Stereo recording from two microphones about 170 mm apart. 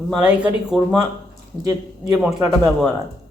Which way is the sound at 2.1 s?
5° right (ahead or behind).